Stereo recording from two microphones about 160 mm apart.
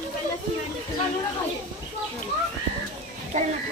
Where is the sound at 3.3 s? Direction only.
50° right (ahead or behind).